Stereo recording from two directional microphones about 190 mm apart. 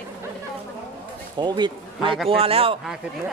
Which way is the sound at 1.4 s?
25° right (ahead or behind).